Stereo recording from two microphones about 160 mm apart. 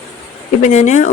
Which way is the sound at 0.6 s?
50° left (ahead or behind).